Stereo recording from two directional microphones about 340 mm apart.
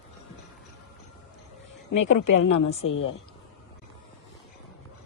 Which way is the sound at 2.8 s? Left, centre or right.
Left.